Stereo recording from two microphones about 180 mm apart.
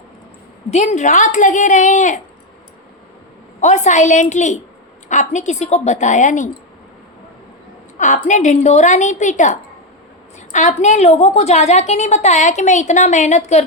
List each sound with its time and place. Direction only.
0.7 s a woman's voice: 40° left (ahead or behind)
3.6 s a woman's voice: 40° left (ahead or behind)
7.9 s a woman's voice: 45° left (ahead or behind)